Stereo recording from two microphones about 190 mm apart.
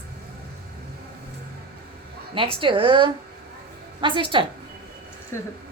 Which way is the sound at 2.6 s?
25° right (ahead or behind).